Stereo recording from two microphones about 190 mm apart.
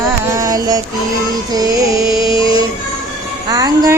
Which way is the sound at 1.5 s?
20° right (ahead or behind).